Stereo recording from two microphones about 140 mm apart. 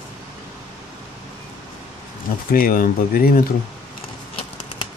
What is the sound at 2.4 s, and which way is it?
Speech, 90° left.